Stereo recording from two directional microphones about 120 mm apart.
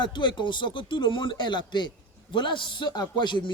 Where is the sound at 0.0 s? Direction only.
40° left (ahead or behind).